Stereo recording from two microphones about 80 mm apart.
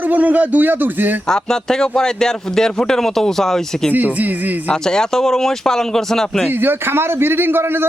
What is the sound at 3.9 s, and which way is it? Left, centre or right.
Speech, right.